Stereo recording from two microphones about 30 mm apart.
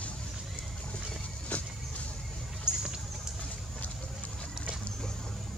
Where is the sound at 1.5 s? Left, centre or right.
Left.